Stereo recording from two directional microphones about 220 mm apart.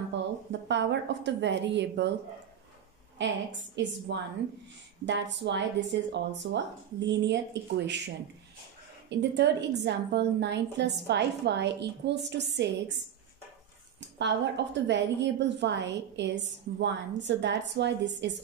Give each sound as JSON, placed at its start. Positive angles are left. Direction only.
{"t": 0.1, "sound": "a woman's voice", "side_deg": -55}
{"t": 3.2, "sound": "a woman's voice", "side_deg": -55}
{"t": 9.2, "sound": "a woman's voice", "side_deg": -50}
{"t": 14.1, "sound": "a woman's voice", "side_deg": -55}